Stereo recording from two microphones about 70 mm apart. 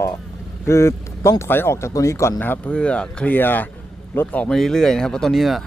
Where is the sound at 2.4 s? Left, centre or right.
Left.